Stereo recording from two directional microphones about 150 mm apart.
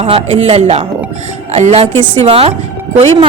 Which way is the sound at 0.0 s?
40° right (ahead or behind).